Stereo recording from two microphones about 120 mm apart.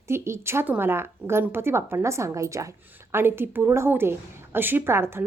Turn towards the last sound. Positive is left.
turn(degrees=-20)  # may be behind; listen again after turning